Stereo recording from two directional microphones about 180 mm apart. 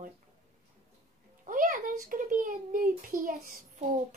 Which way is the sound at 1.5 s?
50° right (ahead or behind).